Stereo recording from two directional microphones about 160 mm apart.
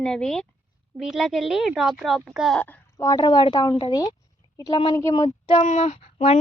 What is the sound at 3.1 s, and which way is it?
Speech, 25° left (ahead or behind).